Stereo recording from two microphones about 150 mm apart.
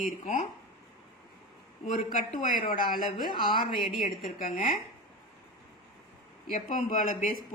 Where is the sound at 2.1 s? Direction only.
65° left (ahead or behind).